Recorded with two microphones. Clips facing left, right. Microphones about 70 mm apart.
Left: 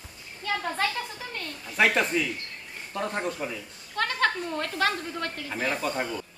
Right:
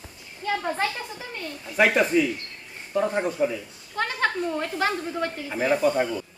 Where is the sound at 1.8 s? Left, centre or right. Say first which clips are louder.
Right 4 dB; centre.